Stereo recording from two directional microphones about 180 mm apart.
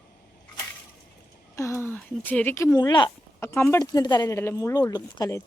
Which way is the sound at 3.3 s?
15° left (ahead or behind).